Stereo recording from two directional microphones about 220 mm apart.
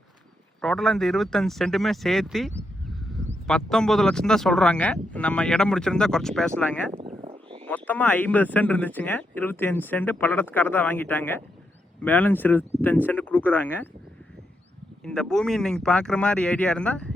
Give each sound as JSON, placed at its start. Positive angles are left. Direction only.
{"t": 0.6, "sound": "speech", "side_deg": 0}
{"t": 7.0, "sound": "a sound", "side_deg": -25}
{"t": 7.7, "sound": "speech", "side_deg": 5}
{"t": 15.0, "sound": "speech", "side_deg": 5}